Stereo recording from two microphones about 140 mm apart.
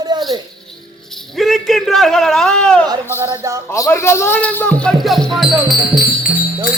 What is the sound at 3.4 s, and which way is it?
Speech, 20° right (ahead or behind).